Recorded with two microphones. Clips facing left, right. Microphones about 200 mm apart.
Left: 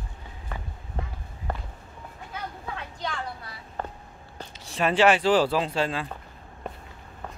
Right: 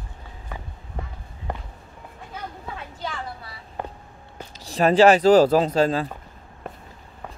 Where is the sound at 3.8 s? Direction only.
15° right (ahead or behind).